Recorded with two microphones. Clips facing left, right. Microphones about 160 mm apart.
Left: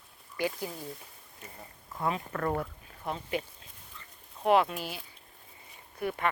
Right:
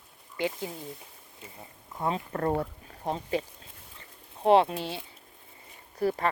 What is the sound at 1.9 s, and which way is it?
Speech, 25° right (ahead or behind).